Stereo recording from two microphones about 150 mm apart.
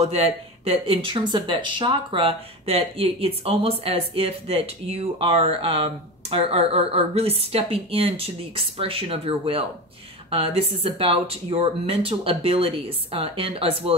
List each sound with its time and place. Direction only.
0.0 s speech: 40° right (ahead or behind)